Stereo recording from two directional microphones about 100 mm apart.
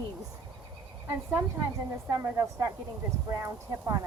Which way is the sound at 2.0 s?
30° right (ahead or behind).